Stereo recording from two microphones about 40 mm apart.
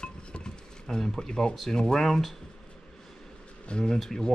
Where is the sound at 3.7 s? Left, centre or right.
Left.